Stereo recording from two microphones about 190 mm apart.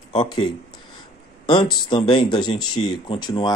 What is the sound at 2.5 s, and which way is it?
Speech, 90° left.